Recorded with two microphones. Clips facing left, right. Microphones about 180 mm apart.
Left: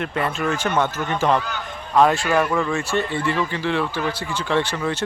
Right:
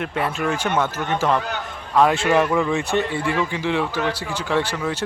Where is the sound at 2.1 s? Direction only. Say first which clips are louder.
Right 2 dB; 20° right (ahead or behind).